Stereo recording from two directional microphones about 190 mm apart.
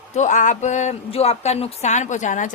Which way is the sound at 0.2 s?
40° left (ahead or behind).